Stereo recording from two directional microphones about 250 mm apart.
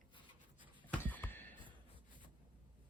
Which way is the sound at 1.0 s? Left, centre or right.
Centre.